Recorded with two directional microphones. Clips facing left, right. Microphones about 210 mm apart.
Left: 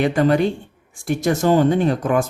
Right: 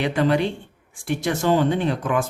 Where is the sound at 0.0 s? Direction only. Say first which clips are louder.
Left 4 dB; 45° left (ahead or behind).